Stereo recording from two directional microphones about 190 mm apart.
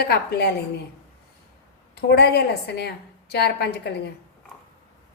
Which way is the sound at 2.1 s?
60° left (ahead or behind).